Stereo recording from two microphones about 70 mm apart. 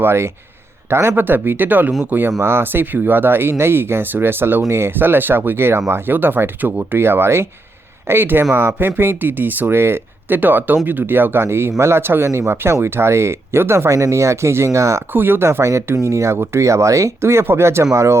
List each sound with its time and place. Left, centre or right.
0.0 s speech: right
15.1 s speech: right